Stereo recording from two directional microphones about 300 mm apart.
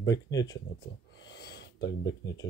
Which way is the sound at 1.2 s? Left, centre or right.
Left.